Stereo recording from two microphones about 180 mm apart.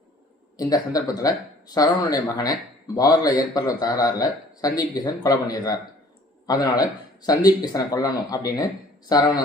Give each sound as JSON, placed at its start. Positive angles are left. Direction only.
{"t": 0.5, "sound": "speech", "side_deg": 20}
{"t": 7.3, "sound": "speech", "side_deg": 20}